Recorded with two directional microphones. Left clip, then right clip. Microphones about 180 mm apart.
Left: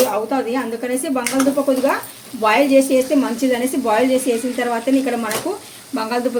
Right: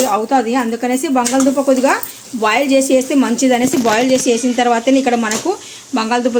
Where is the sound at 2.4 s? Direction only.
50° right (ahead or behind).